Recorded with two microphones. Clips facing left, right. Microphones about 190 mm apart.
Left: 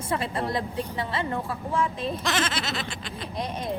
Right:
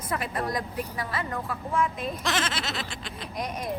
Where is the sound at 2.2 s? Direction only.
Centre (ahead or behind).